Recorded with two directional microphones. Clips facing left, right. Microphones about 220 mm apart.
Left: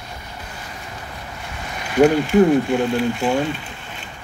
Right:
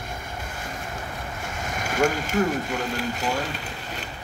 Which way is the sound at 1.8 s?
45° right (ahead or behind).